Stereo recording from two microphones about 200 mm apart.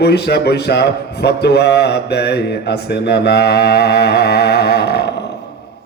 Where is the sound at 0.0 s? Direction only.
55° left (ahead or behind).